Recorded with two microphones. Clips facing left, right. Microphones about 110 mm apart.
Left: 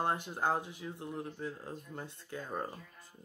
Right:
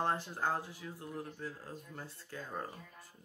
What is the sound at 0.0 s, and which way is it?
Speech, 15° left (ahead or behind).